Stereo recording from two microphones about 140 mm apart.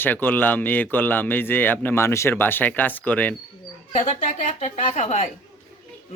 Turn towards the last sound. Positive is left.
turn(degrees=55)  # may be behind; listen again after turning